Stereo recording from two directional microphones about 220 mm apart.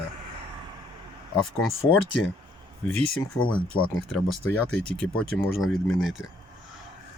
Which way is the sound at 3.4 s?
20° left (ahead or behind).